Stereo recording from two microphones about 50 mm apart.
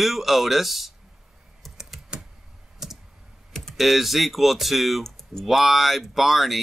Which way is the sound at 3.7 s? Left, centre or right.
Centre.